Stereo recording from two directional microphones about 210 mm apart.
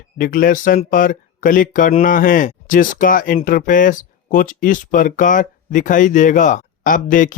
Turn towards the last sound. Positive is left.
turn(degrees=40)  # may be behind; listen again after turning